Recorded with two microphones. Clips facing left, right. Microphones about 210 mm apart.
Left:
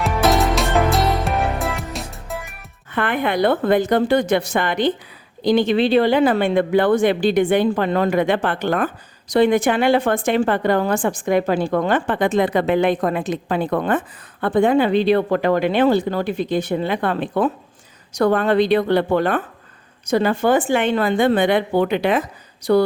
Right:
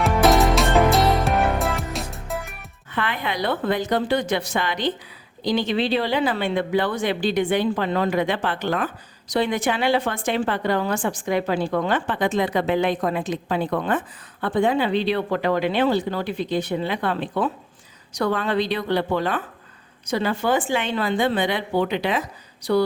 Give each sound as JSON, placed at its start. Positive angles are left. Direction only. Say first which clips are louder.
{"t": 0.0, "sound": "music", "louder": "even", "side_deg": 0}
{"t": 2.9, "sound": "a woman's voice", "louder": "left 6 dB", "side_deg": 55}